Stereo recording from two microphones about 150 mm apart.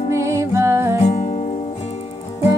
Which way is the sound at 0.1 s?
20° right (ahead or behind).